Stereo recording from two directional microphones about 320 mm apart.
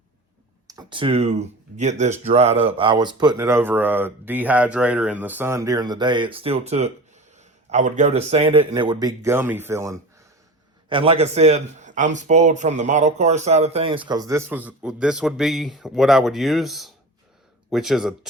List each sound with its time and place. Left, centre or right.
0.7 s speech: centre